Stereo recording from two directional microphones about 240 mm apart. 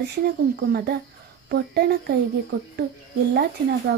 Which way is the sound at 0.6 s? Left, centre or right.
Right.